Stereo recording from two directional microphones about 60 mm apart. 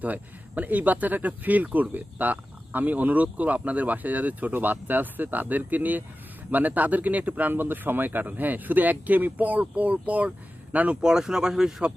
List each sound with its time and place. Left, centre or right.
0.0 s speech: right
11.0 s speech: centre